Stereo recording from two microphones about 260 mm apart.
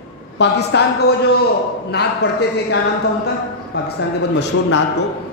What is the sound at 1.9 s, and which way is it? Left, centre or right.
Speech, left.